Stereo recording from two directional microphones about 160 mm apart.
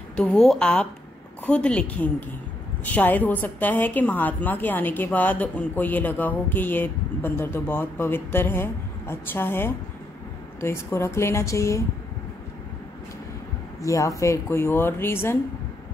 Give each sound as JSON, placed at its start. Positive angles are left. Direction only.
{"t": 0.1, "sound": "a woman's voice", "side_deg": 5}
{"t": 13.7, "sound": "a woman's voice", "side_deg": 20}